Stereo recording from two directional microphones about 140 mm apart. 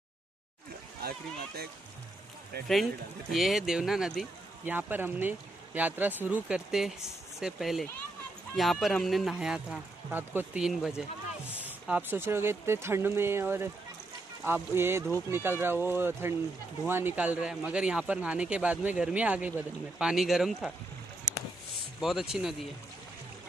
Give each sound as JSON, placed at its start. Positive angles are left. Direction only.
{"t": 2.7, "sound": "speech", "side_deg": 0}
{"t": 4.6, "sound": "speech", "side_deg": -15}
{"t": 11.9, "sound": "speech", "side_deg": -15}
{"t": 22.0, "sound": "speech", "side_deg": -5}